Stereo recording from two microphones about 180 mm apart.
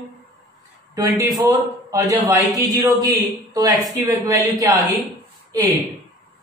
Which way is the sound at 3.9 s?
20° right (ahead or behind).